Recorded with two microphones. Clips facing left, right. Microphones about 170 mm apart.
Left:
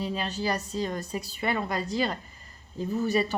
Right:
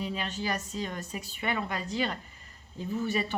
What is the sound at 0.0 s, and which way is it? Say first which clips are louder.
Speech: left 3 dB; 35° left (ahead or behind).